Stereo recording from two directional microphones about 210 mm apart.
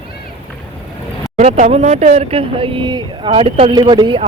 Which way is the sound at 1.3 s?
35° right (ahead or behind).